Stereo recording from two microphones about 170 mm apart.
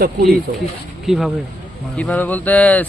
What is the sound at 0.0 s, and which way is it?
Speech, 65° right (ahead or behind).